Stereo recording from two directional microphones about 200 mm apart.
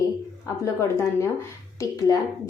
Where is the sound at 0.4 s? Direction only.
15° left (ahead or behind).